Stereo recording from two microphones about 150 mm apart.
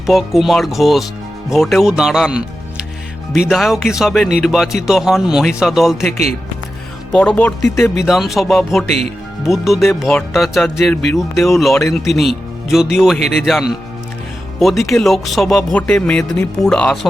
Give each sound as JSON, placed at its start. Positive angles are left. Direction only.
{"t": 0.0, "sound": "speech", "side_deg": 0}
{"t": 6.1, "sound": "speech", "side_deg": -45}
{"t": 7.1, "sound": "speech", "side_deg": 10}
{"t": 8.0, "sound": "speech", "side_deg": 0}